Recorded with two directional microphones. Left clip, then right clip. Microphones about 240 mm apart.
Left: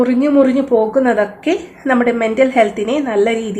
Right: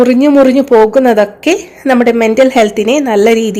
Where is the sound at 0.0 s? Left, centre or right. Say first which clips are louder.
Right 6 dB; right.